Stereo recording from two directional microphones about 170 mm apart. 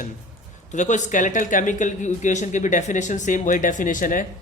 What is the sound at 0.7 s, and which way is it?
Speech, 45° left (ahead or behind).